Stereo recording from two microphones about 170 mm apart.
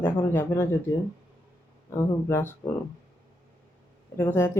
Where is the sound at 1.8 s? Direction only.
15° left (ahead or behind).